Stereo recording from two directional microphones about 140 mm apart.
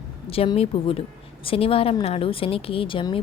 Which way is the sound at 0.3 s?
45° left (ahead or behind).